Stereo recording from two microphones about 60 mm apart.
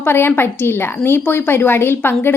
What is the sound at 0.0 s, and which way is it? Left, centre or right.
A woman's voice, left.